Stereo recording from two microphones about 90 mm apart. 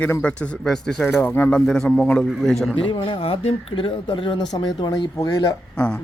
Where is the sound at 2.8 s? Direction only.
70° left (ahead or behind).